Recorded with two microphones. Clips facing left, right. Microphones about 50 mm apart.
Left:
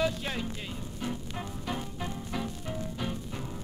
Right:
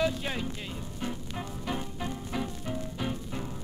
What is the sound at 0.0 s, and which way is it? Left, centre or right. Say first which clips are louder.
Music: right 1 dB; centre.